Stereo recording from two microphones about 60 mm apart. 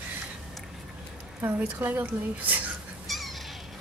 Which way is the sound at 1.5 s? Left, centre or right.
Right.